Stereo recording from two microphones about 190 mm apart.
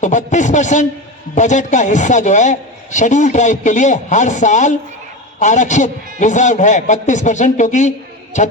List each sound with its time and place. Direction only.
0.0 s a man's voice: 40° left (ahead or behind)